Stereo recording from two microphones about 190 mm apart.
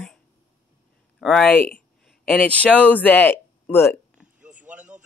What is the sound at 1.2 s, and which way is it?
Speech, 5° left (ahead or behind).